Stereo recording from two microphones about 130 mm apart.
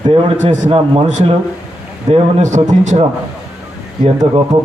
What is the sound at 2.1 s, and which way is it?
Speech, 65° right (ahead or behind).